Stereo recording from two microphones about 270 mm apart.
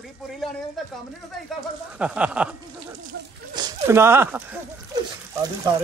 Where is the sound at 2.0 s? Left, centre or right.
Centre.